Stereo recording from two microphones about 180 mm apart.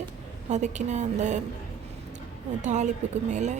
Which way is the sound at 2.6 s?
40° right (ahead or behind).